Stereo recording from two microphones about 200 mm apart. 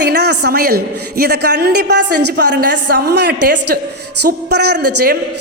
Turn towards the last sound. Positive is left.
turn(degrees=-55)  # may be behind; listen again after turning